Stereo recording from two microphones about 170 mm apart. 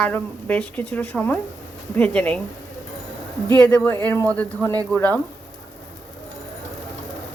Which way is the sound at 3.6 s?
10° left (ahead or behind).